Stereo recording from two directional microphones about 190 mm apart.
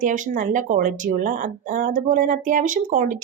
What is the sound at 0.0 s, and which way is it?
Speech, 45° right (ahead or behind).